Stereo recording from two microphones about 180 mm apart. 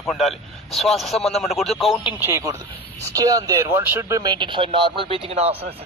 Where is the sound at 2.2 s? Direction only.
15° right (ahead or behind).